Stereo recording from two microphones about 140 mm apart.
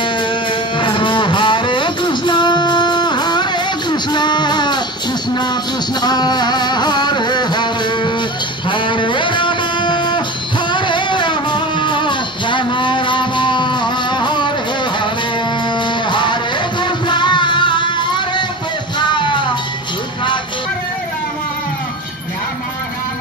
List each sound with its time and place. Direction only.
0.0 s music: 35° left (ahead or behind)
15.7 s music: 35° left (ahead or behind)